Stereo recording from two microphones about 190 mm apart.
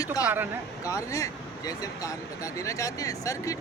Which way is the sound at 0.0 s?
20° left (ahead or behind).